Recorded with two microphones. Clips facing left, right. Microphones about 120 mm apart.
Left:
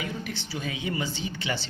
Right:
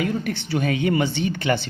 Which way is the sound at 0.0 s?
55° right (ahead or behind).